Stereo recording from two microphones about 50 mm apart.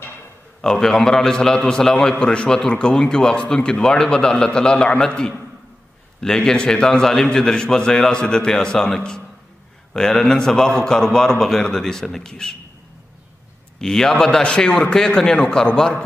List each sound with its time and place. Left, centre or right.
0.6 s a man's voice: centre
13.7 s a man's voice: centre